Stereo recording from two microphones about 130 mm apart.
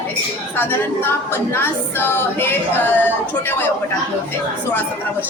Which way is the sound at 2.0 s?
15° left (ahead or behind).